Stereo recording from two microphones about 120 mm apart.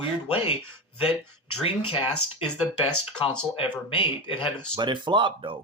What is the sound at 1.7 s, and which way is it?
Speech, 50° left (ahead or behind).